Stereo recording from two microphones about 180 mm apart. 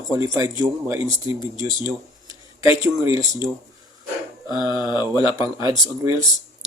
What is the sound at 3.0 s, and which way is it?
Speech, 20° right (ahead or behind).